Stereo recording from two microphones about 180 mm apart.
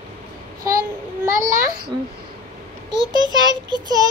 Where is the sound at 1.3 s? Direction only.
45° right (ahead or behind).